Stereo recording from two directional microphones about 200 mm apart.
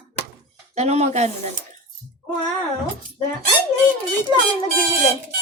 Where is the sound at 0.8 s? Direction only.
35° right (ahead or behind).